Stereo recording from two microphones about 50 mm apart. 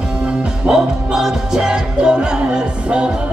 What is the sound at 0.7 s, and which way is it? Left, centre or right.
Music, centre.